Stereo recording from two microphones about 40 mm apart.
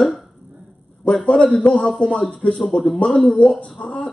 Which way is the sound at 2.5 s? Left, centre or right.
Centre.